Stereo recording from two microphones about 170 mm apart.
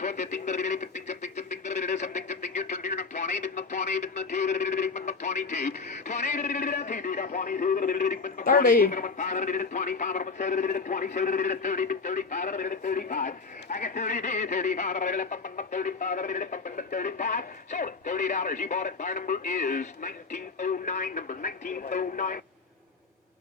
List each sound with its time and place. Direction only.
0.0 s speech: 45° left (ahead or behind)